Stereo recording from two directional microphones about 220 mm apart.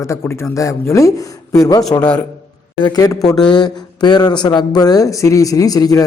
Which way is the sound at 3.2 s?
Centre (ahead or behind).